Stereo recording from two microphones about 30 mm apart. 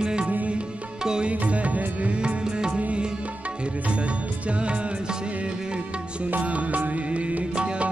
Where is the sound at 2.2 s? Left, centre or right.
Right.